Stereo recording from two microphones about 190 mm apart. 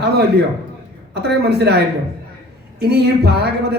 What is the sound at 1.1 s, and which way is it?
Speech, 60° right (ahead or behind).